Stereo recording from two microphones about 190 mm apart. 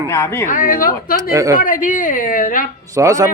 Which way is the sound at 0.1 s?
15° left (ahead or behind).